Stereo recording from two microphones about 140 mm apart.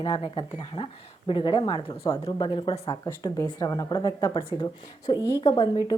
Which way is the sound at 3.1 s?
25° left (ahead or behind).